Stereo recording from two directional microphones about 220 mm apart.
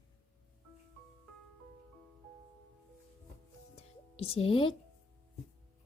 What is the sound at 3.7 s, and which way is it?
Music, 25° left (ahead or behind).